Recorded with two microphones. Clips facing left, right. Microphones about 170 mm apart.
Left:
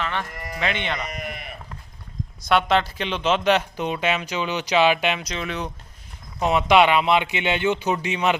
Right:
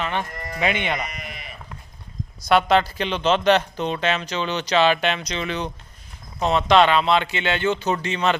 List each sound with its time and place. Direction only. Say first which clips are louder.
0.0 s speech: right 2 dB; 20° right (ahead or behind)
1.1 s sheep: left 4 dB; 55° left (ahead or behind)
2.5 s speech: right 2 dB; centre (ahead or behind)